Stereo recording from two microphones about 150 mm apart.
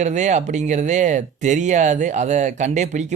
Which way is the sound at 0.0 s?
50° right (ahead or behind).